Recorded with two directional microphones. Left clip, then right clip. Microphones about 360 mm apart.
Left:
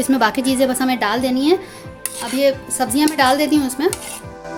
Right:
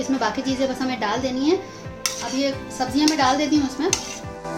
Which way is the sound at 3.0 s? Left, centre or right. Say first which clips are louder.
Left 4 dB; left.